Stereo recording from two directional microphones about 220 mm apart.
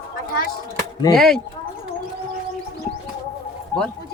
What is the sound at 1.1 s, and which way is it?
Speech, centre (ahead or behind).